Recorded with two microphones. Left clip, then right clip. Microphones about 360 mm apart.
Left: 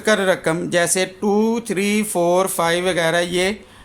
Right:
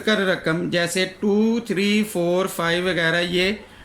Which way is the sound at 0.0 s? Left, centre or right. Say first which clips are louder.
Left 4 dB; centre.